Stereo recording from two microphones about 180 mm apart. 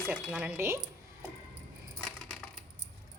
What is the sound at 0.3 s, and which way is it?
Speech, 10° right (ahead or behind).